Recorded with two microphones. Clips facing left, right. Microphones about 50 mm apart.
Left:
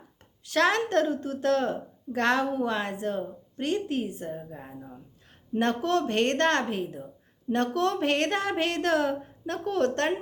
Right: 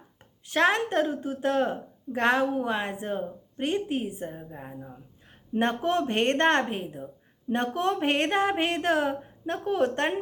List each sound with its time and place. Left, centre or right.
0.4 s a woman's voice: right
5.5 s a woman's voice: right